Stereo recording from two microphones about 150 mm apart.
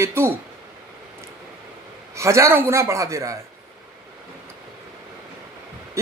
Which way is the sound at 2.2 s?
20° right (ahead or behind).